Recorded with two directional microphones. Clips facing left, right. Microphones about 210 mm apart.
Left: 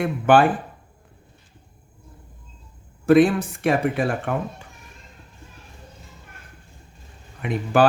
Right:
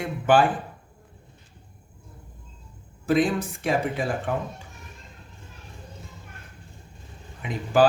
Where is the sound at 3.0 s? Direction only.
60° left (ahead or behind).